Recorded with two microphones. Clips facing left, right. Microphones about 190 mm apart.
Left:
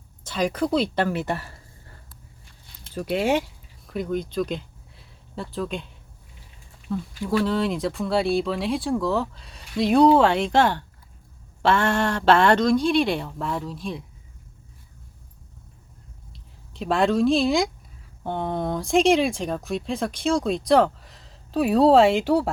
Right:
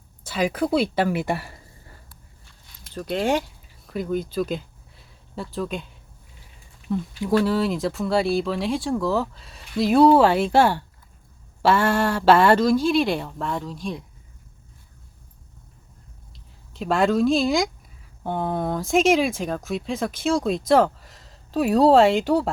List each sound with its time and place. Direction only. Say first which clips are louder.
0.3 s speech: right 1 dB; 5° right (ahead or behind)
2.9 s speech: left 1 dB; 10° left (ahead or behind)
6.9 s speech: right 3 dB; 20° right (ahead or behind)
7.3 s speech: right 2 dB; 5° right (ahead or behind)
16.3 s speech: left 1 dB; centre (ahead or behind)